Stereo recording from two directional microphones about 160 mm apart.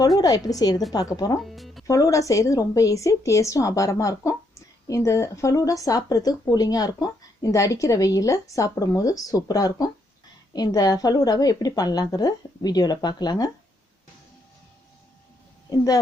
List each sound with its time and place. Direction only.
0.2 s speech: 25° left (ahead or behind)
1.4 s music: centre (ahead or behind)
1.9 s speech: 20° left (ahead or behind)